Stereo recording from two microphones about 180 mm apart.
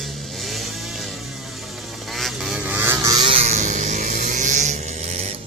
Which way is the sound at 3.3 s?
35° right (ahead or behind).